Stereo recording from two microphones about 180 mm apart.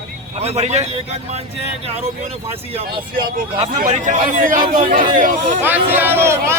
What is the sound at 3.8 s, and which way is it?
A man's voice, 45° right (ahead or behind).